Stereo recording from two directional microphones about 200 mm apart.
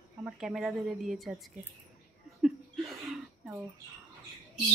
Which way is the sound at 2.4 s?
Centre (ahead or behind).